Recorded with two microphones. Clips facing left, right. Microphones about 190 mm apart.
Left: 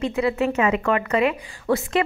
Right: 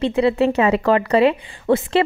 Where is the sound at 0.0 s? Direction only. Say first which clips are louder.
Right 5 dB; 30° right (ahead or behind).